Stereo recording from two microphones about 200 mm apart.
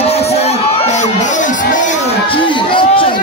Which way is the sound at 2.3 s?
25° left (ahead or behind).